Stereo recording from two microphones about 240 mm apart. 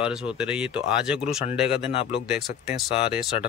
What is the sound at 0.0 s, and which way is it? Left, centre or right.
Speech, centre.